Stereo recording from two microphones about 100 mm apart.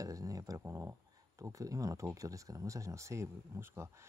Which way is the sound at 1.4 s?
35° right (ahead or behind).